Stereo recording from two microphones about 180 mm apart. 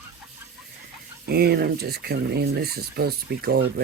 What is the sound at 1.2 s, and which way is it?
Speech, 60° right (ahead or behind).